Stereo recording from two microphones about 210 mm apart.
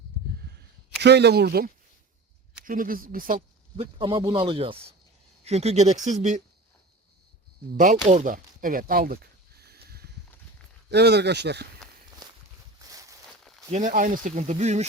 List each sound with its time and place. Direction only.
1.0 s speech: 55° right (ahead or behind)
3.9 s speech: 25° right (ahead or behind)
7.8 s speech: 35° right (ahead or behind)
9.6 s a sound: 50° right (ahead or behind)
10.9 s speech: 50° right (ahead or behind)
12.8 s a sound: 15° right (ahead or behind)
13.7 s speech: 35° right (ahead or behind)